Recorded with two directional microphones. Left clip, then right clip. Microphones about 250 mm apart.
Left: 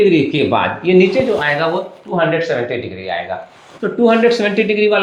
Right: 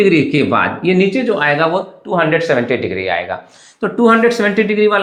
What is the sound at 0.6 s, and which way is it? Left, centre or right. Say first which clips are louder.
Speech: left 2 dB; right.